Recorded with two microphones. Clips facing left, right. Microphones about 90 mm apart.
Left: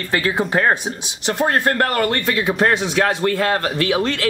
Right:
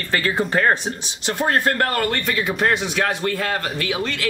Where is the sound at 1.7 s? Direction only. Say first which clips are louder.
Left 2 dB; 25° left (ahead or behind).